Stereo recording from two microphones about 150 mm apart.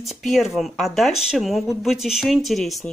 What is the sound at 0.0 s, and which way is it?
Speech, centre (ahead or behind).